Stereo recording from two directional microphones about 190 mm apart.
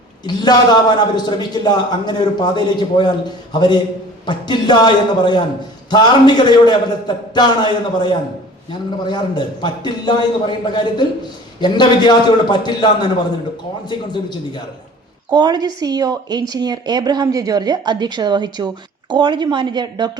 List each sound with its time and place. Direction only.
0.3 s a man's voice: 20° left (ahead or behind)
15.3 s speech: 20° right (ahead or behind)